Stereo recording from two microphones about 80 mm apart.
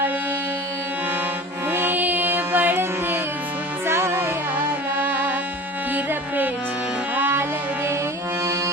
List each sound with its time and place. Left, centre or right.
1.7 s music: right